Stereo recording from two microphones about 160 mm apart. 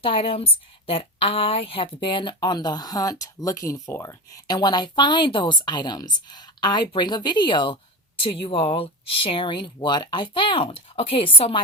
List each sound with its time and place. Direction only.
0.0 s speech: 35° left (ahead or behind)